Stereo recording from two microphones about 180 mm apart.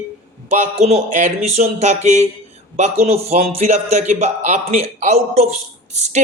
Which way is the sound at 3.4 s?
35° right (ahead or behind).